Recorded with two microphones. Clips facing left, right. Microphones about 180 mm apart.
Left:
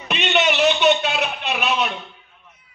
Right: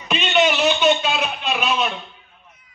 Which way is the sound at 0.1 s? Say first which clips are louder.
Right 2 dB; 65° left (ahead or behind).